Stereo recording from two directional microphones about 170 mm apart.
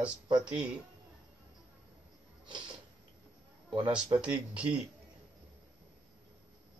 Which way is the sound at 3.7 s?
30° right (ahead or behind).